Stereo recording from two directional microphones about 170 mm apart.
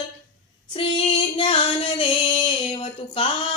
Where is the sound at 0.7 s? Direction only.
30° left (ahead or behind).